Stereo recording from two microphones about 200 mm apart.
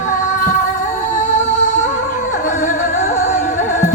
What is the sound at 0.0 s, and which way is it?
Music, 40° left (ahead or behind).